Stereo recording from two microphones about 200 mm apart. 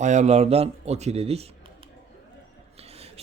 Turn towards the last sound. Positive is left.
turn(degrees=-30)  # may be behind; listen again after turning